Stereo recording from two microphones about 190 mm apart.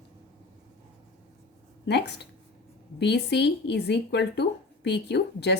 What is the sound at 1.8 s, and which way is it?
Speech, 65° left (ahead or behind).